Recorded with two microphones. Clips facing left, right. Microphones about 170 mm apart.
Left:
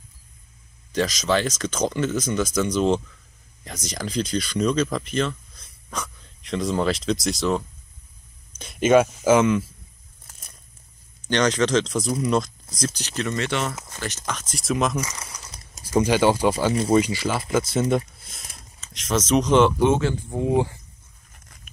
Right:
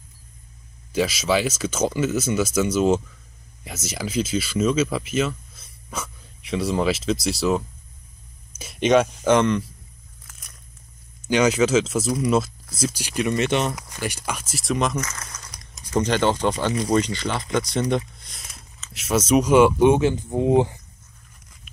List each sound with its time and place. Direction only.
0.9 s speech: 10° right (ahead or behind)
11.2 s speech: 10° right (ahead or behind)
15.0 s crumpling: 10° left (ahead or behind)
15.9 s speech: 10° left (ahead or behind); by 20.7 s 20° right (ahead or behind)